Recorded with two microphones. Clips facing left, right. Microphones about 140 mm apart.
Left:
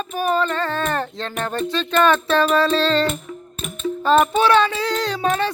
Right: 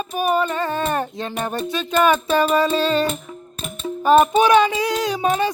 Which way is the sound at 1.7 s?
10° right (ahead or behind).